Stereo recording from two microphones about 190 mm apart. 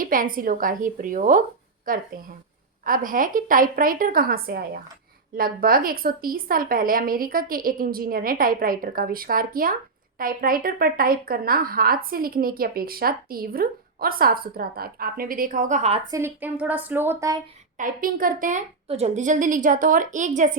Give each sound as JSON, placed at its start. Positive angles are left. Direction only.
{"t": 0.0, "sound": "speech", "side_deg": -45}
{"t": 16.1, "sound": "a woman's voice", "side_deg": -10}
{"t": 17.7, "sound": "speech", "side_deg": -45}